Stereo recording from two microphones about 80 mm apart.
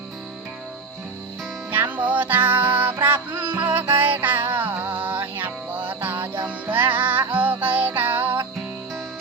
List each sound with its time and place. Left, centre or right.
1.7 s music: right